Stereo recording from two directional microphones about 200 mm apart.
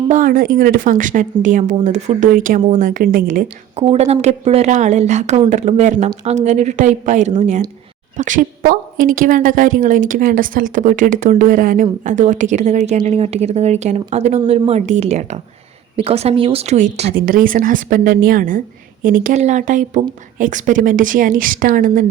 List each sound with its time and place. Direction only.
0.1 s speech: 45° right (ahead or behind)
3.8 s a woman's voice: 30° right (ahead or behind)
17.2 s speech: 45° right (ahead or behind)